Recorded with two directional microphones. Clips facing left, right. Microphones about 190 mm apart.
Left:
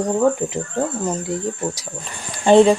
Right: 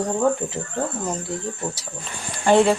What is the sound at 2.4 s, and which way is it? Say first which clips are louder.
Speech: left 5 dB; 25° left (ahead or behind).